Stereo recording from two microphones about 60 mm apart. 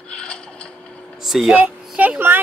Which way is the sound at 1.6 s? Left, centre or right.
Right.